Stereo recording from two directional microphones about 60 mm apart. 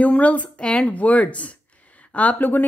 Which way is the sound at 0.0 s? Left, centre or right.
Left.